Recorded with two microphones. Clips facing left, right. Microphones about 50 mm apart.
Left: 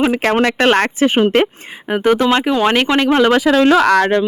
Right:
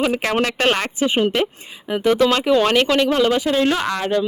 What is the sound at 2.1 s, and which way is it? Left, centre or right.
Speech, left.